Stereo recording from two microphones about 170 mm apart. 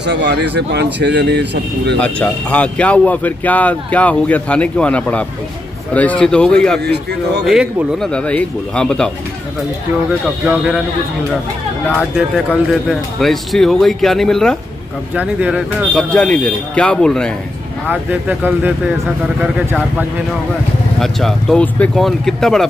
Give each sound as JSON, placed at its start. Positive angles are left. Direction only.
{"t": 0.0, "sound": "speech", "side_deg": -90}
{"t": 2.0, "sound": "a man's voice", "side_deg": 5}
{"t": 6.8, "sound": "a man's voice", "side_deg": -75}
{"t": 7.4, "sound": "speech", "side_deg": 0}
{"t": 10.2, "sound": "speech", "side_deg": -5}
{"t": 11.9, "sound": "speech", "side_deg": 5}
{"t": 19.4, "sound": "speech", "side_deg": -10}
{"t": 21.0, "sound": "speech", "side_deg": 0}